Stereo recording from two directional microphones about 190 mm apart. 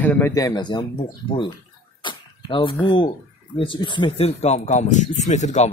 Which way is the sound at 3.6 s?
25° left (ahead or behind).